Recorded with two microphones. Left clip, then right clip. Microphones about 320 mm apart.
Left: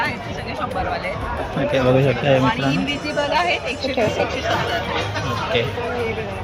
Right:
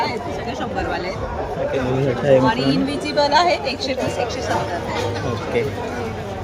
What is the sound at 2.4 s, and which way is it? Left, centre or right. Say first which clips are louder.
A man's voice: right 1 dB; centre.